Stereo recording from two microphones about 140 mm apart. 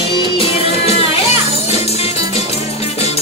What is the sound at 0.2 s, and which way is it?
Music, 45° left (ahead or behind).